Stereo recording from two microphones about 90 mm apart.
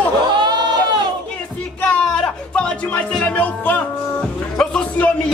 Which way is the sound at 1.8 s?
15° left (ahead or behind).